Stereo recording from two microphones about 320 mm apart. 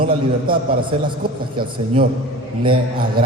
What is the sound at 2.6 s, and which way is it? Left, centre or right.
Speech, centre.